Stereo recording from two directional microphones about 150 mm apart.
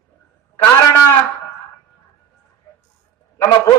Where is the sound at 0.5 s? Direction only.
15° left (ahead or behind).